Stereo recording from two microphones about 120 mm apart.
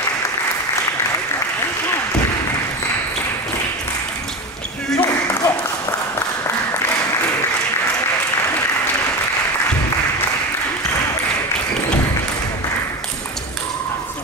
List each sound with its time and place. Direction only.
5.0 s applause: 25° left (ahead or behind)